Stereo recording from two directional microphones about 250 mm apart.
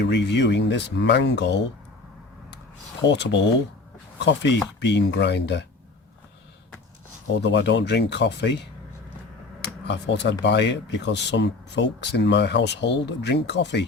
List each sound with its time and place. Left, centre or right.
0.0 s speech: left
3.1 s speech: left
7.4 s speech: left
9.8 s speech: left